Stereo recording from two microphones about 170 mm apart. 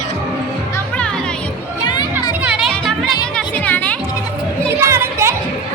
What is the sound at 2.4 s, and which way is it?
Music, 5° right (ahead or behind).